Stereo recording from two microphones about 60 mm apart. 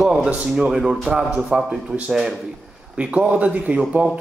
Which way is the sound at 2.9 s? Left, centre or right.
Centre.